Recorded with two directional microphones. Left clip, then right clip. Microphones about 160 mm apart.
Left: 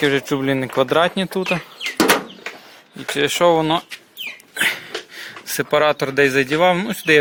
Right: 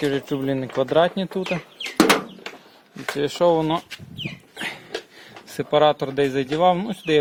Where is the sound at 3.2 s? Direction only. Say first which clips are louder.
Left 4 dB; 10° right (ahead or behind).